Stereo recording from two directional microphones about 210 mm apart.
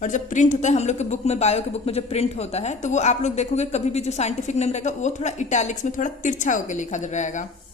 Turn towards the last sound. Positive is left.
turn(degrees=35)  # may be behind; listen again after turning